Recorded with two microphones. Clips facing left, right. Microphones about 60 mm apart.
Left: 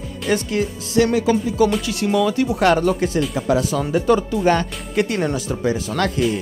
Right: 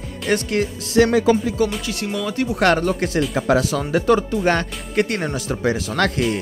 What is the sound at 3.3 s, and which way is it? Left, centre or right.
Speech, right.